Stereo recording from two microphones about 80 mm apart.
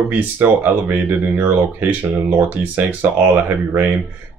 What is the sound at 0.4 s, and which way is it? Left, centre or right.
Speech, right.